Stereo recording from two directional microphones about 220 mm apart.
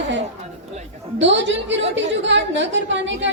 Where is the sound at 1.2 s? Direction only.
55° right (ahead or behind).